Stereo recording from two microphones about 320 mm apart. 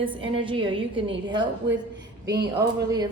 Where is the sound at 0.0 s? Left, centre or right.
Centre.